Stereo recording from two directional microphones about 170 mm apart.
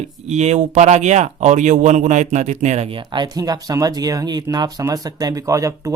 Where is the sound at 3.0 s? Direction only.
25° right (ahead or behind).